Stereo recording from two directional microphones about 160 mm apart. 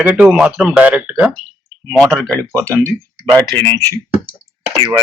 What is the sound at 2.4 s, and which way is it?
Speech, 20° right (ahead or behind).